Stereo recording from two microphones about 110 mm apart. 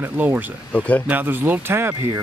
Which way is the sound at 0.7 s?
15° left (ahead or behind).